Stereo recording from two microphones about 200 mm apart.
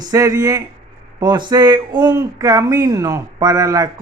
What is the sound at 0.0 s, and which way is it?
Speech, 20° right (ahead or behind).